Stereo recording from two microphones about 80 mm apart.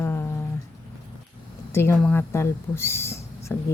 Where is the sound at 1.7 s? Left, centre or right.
Left.